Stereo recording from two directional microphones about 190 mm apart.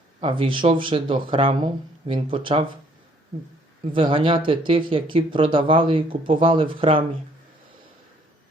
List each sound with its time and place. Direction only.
0.2 s speech: 25° right (ahead or behind)
3.9 s speech: 25° right (ahead or behind)